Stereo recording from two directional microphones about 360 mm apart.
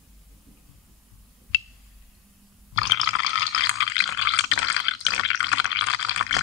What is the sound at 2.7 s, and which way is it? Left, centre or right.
Water, left.